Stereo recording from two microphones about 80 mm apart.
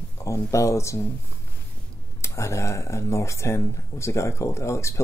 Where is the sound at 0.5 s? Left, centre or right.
Left.